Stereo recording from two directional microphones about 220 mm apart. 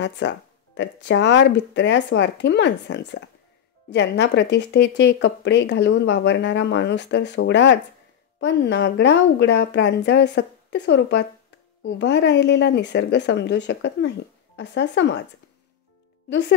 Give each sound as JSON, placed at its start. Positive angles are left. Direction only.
{"t": 0.0, "sound": "speech", "side_deg": 55}
{"t": 16.3, "sound": "speech", "side_deg": 50}